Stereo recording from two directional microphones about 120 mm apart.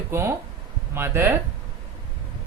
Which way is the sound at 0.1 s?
20° right (ahead or behind).